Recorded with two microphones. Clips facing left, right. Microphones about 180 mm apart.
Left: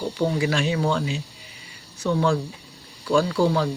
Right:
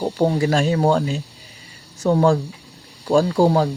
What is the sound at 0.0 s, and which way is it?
Speech, 45° right (ahead or behind).